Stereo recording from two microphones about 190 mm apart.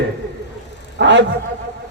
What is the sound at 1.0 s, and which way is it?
Speech, 70° right (ahead or behind).